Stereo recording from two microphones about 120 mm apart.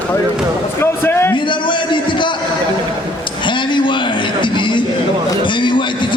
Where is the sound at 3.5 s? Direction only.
40° left (ahead or behind).